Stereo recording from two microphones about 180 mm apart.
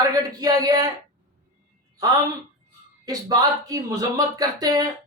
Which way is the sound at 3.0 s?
20° right (ahead or behind).